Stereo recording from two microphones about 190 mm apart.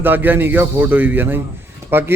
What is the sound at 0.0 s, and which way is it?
A man's voice, 10° right (ahead or behind).